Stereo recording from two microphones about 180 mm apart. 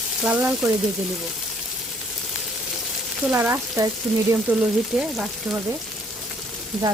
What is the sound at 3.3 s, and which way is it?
Speech, 15° right (ahead or behind).